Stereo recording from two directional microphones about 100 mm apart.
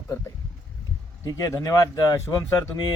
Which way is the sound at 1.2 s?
35° left (ahead or behind).